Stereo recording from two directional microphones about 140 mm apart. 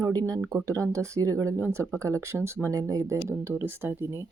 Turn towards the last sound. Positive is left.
turn(degrees=-15)  # may be behind; listen again after turning